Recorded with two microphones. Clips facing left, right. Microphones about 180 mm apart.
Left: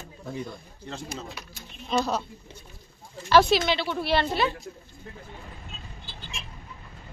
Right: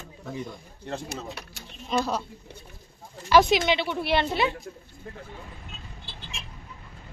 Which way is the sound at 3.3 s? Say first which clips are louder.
Even; 15° right (ahead or behind).